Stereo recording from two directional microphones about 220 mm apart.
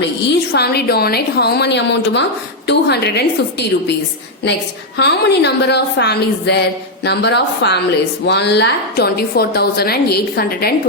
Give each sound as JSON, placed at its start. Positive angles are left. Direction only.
{"t": 0.5, "sound": "a woman's voice", "side_deg": 45}
{"t": 4.9, "sound": "a woman's voice", "side_deg": 50}